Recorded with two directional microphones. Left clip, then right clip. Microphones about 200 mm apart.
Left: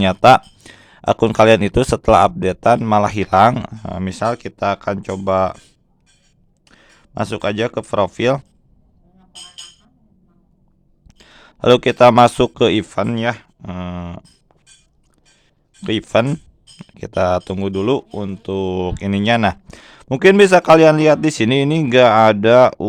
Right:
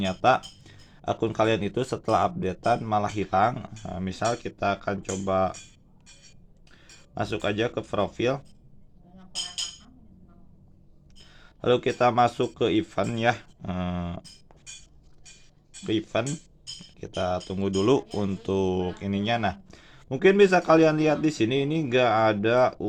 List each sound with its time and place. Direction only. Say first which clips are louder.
0.0 s speech: left 12 dB; 50° left (ahead or behind)
6.7 s speech: left 4 dB; 45° left (ahead or behind)
11.2 s speech: left 12 dB; 50° left (ahead or behind); by 14.3 s 25° left (ahead or behind)
15.8 s speech: left 11 dB; 50° left (ahead or behind)
17.6 s speech: left 5 dB; 30° left (ahead or behind); by 22.9 s 50° left (ahead or behind)